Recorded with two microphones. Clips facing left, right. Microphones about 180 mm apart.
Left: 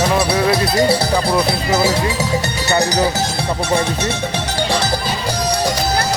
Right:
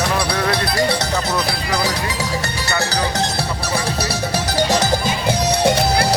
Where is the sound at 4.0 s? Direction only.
35° right (ahead or behind).